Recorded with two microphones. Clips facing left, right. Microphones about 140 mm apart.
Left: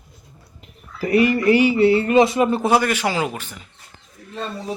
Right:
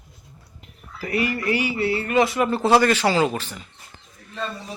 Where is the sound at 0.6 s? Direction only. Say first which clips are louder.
Left 7 dB; 25° left (ahead or behind).